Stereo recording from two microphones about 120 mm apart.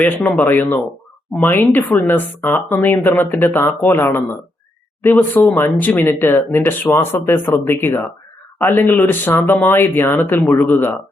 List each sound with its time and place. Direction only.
0.0 s speech: 10° left (ahead or behind)